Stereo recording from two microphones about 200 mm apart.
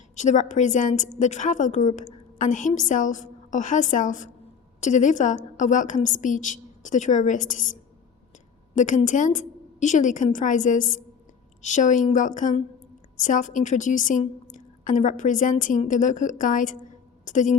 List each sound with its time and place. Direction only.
0.2 s a woman's voice: 35° left (ahead or behind)
8.7 s a woman's voice: 35° left (ahead or behind)